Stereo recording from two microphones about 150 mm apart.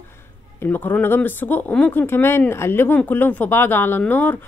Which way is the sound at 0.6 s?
15° left (ahead or behind).